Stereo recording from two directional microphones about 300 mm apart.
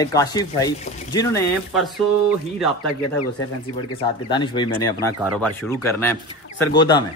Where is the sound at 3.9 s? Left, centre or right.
Centre.